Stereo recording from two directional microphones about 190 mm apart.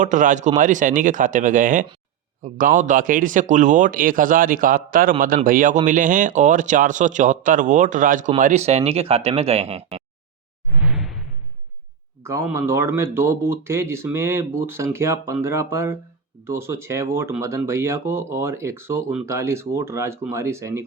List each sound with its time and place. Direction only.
0.0 s speech: 40° right (ahead or behind)
10.8 s whoosh: 5° right (ahead or behind)
12.2 s speech: 15° right (ahead or behind)